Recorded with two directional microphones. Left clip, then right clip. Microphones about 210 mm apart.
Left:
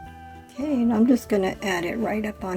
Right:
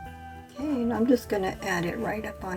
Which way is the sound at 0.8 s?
35° left (ahead or behind).